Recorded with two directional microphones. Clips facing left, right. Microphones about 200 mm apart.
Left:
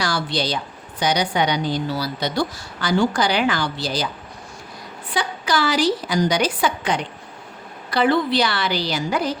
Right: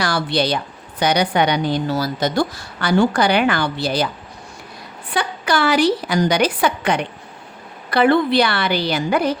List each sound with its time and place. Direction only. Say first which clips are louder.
0.0 s a woman's voice: right 4 dB; 60° right (ahead or behind)
5.1 s a woman's voice: right 2 dB; 60° right (ahead or behind)